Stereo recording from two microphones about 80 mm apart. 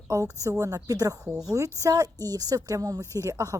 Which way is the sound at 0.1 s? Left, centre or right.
Right.